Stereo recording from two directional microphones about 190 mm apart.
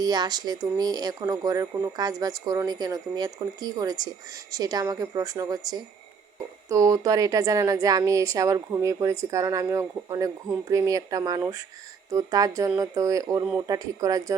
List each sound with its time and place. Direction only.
0.0 s speech: 20° right (ahead or behind)